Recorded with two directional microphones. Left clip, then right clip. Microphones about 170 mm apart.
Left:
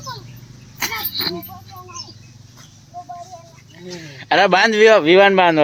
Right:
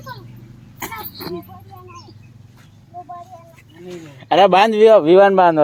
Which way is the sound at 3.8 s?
10° right (ahead or behind).